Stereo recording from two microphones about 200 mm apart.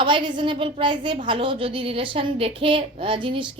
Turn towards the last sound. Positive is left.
turn(degrees=-25)  # may be behind; listen again after turning